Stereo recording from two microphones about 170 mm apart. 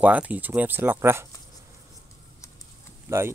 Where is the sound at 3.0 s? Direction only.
15° right (ahead or behind).